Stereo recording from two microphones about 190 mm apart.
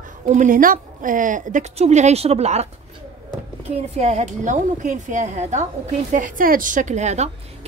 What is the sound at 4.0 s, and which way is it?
A woman's voice, 35° right (ahead or behind).